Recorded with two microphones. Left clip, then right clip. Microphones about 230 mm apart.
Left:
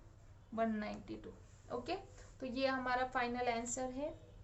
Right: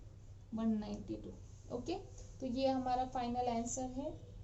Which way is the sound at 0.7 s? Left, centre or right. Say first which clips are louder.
Left 1 dB; left.